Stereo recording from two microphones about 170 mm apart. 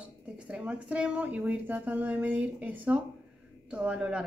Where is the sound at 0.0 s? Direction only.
5° right (ahead or behind).